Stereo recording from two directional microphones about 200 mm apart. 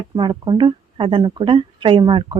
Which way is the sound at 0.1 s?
20° right (ahead or behind).